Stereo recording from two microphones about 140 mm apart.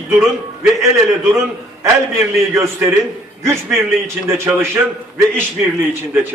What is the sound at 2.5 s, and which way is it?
Speech, 20° right (ahead or behind).